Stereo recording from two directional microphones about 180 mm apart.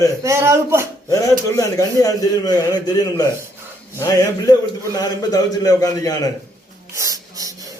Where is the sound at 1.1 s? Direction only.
20° left (ahead or behind).